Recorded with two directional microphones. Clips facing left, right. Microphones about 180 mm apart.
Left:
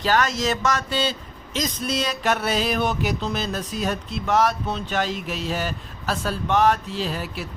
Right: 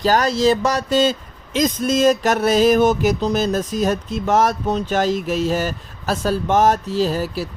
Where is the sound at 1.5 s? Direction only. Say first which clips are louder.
Right 8 dB; 50° right (ahead or behind).